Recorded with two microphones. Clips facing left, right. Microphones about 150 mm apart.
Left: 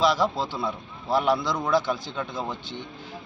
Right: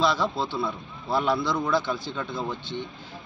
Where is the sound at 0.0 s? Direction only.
15° left (ahead or behind).